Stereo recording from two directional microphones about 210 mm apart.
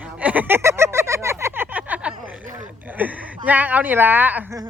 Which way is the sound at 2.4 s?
40° right (ahead or behind).